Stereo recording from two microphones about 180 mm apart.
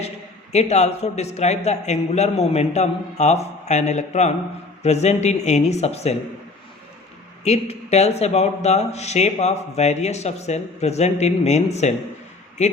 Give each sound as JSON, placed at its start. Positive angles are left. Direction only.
{"t": 0.5, "sound": "speech", "side_deg": 40}
{"t": 7.4, "sound": "speech", "side_deg": 35}